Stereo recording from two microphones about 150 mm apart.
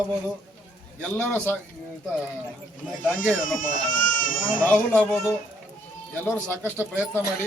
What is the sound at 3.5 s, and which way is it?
Speech, 65° left (ahead or behind).